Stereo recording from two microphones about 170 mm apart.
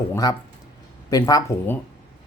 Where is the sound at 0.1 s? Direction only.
20° left (ahead or behind).